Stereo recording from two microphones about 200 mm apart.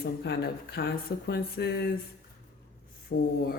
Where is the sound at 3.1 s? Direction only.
60° left (ahead or behind).